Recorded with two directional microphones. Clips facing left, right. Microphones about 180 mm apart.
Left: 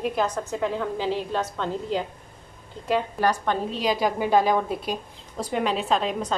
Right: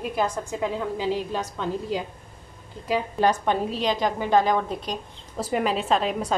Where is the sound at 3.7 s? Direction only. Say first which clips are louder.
Even; 5° left (ahead or behind).